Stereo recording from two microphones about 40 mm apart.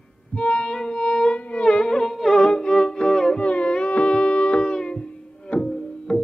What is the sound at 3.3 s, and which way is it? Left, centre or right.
Music, left.